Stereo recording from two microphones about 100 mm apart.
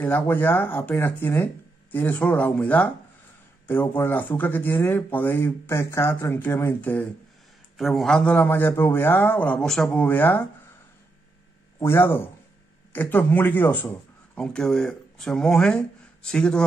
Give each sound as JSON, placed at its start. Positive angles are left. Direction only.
{"t": 0.0, "sound": "speech", "side_deg": 20}
{"t": 7.7, "sound": "speech", "side_deg": 0}
{"t": 9.8, "sound": "speech", "side_deg": 15}
{"t": 11.8, "sound": "speech", "side_deg": 25}
{"t": 14.4, "sound": "speech", "side_deg": 5}